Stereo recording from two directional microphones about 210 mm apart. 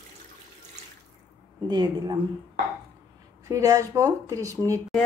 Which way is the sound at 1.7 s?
20° right (ahead or behind).